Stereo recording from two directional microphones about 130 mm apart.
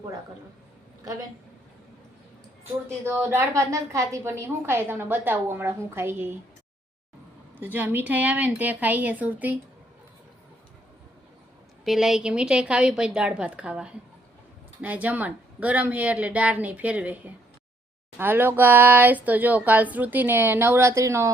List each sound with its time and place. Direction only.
3.0 s a woman's voice: 15° right (ahead or behind)
7.6 s a woman's voice: 15° right (ahead or behind)
11.9 s a woman's voice: 5° right (ahead or behind); by 21.3 s 20° right (ahead or behind)